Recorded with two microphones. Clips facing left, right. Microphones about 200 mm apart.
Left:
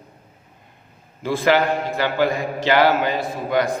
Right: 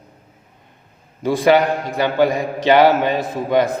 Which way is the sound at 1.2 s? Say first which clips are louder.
Right 4 dB; 15° right (ahead or behind).